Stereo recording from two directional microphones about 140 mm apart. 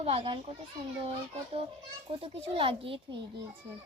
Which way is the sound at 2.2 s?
40° right (ahead or behind).